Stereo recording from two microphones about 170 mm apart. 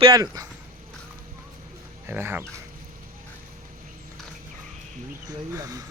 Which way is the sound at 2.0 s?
10° right (ahead or behind).